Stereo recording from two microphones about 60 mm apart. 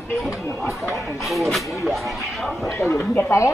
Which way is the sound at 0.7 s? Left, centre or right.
Left.